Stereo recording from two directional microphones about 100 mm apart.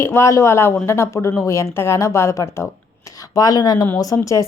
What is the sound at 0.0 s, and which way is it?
Speech, 25° left (ahead or behind).